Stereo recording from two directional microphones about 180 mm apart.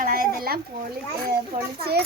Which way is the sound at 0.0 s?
55° right (ahead or behind).